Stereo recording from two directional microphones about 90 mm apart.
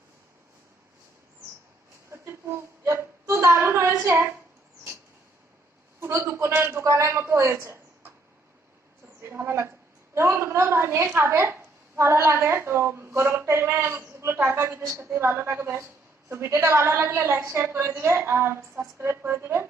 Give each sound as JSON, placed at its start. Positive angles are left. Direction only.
{"t": 2.0, "sound": "a sound", "side_deg": -30}
{"t": 6.0, "sound": "a man's voice", "side_deg": -35}
{"t": 9.2, "sound": "a woman's voice", "side_deg": -25}